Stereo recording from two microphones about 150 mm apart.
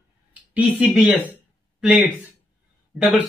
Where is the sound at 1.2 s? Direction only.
10° right (ahead or behind).